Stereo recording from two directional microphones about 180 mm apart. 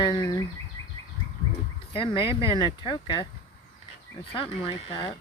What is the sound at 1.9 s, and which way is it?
Speech, 30° left (ahead or behind).